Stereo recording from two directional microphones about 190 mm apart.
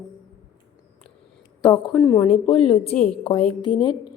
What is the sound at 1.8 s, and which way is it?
Speech, 15° left (ahead or behind).